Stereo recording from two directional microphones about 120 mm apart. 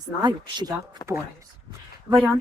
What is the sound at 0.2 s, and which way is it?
Speech, 35° right (ahead or behind).